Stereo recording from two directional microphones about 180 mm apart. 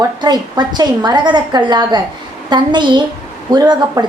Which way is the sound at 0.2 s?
25° right (ahead or behind).